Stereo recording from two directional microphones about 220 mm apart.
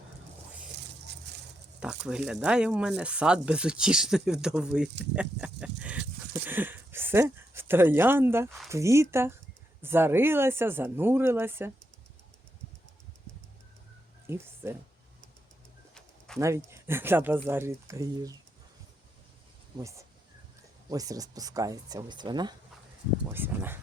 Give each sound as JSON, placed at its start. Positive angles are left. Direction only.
{"t": 1.8, "sound": "speech", "side_deg": -5}
{"t": 8.4, "sound": "speech", "side_deg": 0}
{"t": 8.7, "sound": "speech", "side_deg": -15}
{"t": 14.3, "sound": "speech", "side_deg": -10}
{"t": 16.0, "sound": "a sound", "side_deg": 0}
{"t": 16.4, "sound": "speech", "side_deg": -15}
{"t": 19.8, "sound": "speech", "side_deg": -15}